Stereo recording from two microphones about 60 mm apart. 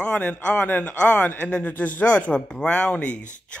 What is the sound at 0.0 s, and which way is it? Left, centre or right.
Speech, left.